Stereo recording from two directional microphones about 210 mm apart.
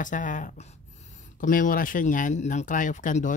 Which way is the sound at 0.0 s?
40° left (ahead or behind).